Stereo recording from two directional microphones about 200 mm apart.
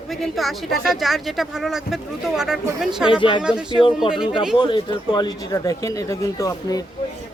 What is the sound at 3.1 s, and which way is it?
Speech, 25° left (ahead or behind).